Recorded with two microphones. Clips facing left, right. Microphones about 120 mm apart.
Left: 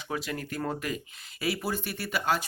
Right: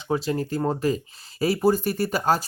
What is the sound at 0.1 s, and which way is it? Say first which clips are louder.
Speech: right 9 dB; 30° right (ahead or behind).